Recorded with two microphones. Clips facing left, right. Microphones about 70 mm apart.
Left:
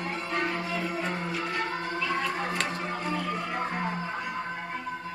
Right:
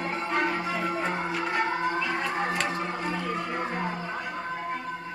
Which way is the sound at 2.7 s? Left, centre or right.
Right.